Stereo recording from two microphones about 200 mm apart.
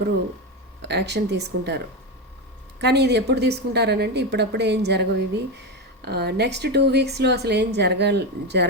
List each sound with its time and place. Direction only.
0.8 s a woman's voice: 55° right (ahead or behind)
2.8 s a woman's voice: 55° right (ahead or behind)